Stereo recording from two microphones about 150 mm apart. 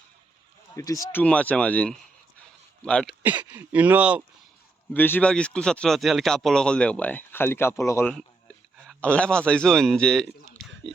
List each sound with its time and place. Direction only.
0.8 s speech: 20° left (ahead or behind)
1.2 s speech: 10° left (ahead or behind)
3.5 s speech: 10° right (ahead or behind)
4.9 s speech: 10° left (ahead or behind)
8.0 s a man's voice: 5° left (ahead or behind)